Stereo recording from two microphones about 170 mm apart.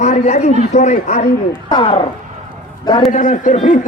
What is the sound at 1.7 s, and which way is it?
Speech, 25° left (ahead or behind).